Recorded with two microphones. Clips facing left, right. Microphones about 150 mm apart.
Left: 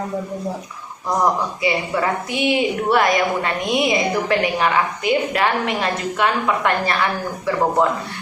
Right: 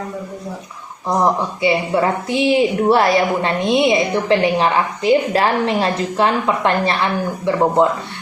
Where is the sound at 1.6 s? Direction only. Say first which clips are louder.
Right 4 dB; 25° right (ahead or behind).